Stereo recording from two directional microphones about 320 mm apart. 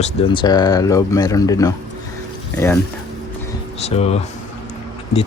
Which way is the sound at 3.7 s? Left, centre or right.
Centre.